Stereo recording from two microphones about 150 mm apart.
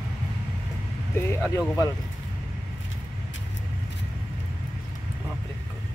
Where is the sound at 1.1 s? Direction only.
15° left (ahead or behind).